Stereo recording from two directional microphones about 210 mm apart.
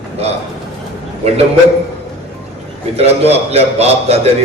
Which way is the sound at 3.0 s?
30° right (ahead or behind).